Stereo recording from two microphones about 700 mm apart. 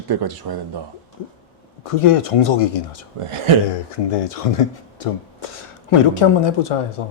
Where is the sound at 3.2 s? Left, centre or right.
Right.